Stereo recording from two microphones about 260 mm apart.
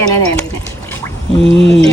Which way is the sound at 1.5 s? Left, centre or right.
Right.